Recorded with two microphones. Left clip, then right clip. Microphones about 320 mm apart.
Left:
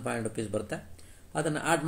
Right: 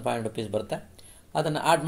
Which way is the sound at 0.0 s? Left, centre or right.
Centre.